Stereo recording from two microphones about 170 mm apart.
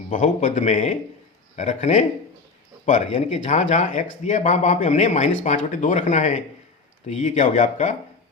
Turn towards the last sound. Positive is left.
turn(degrees=45)  # may be behind; listen again after turning